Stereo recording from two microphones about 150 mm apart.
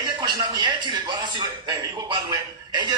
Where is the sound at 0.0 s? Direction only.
30° right (ahead or behind).